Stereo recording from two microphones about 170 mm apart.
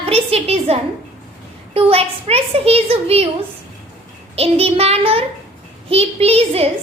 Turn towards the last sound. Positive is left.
turn(degrees=-35)  # may be behind; listen again after turning